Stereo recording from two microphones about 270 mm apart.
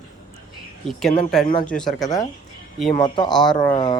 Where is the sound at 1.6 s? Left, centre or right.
Centre.